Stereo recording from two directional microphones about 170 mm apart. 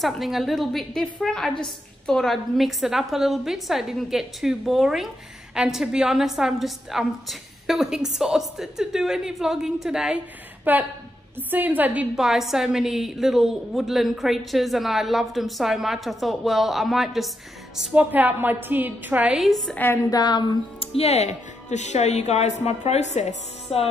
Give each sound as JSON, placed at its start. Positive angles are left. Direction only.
{"t": 0.0, "sound": "a woman's voice", "side_deg": 0}